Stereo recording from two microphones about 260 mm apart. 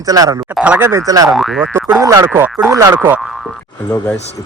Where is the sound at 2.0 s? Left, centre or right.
Centre.